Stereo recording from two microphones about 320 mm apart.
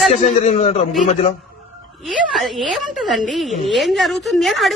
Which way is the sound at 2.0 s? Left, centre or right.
Centre.